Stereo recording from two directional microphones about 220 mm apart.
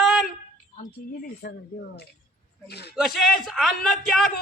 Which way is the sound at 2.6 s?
50° left (ahead or behind).